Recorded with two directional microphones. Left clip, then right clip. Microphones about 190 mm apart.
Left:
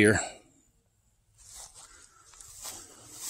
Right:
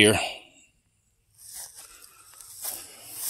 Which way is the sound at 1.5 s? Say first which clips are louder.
Right 4 dB; 45° right (ahead or behind).